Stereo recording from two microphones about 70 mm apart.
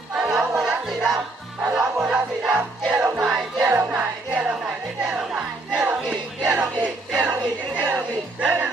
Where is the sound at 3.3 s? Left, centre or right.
Centre.